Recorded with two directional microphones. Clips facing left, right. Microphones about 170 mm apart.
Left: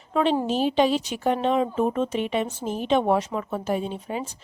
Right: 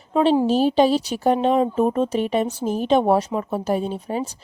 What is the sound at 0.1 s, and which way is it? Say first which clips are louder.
Speech: right 5 dB; 35° right (ahead or behind).